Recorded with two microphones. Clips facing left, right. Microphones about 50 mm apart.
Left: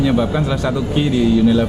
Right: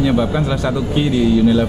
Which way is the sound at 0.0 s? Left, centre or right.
Right.